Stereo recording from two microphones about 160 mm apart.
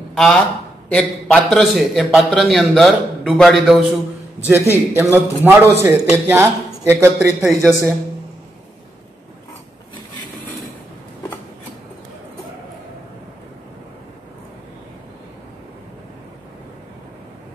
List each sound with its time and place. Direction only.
0.1 s a man's voice: 5° left (ahead or behind)
4.5 s a man's voice: 15° right (ahead or behind)
7.4 s a man's voice: 5° right (ahead or behind)